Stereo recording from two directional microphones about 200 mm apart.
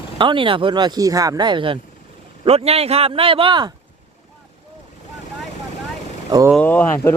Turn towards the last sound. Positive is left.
turn(degrees=10)  # may be behind; listen again after turning